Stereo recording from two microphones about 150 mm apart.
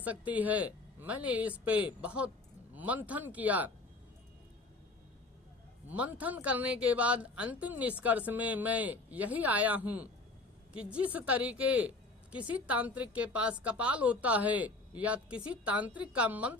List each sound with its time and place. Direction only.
0.0 s speech: 10° right (ahead or behind)
5.9 s speech: 10° right (ahead or behind)